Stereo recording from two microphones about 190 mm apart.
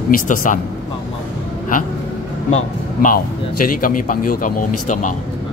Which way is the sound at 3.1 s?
50° left (ahead or behind).